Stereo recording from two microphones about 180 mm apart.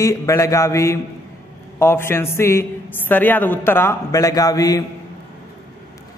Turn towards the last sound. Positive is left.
turn(degrees=20)  # may be behind; listen again after turning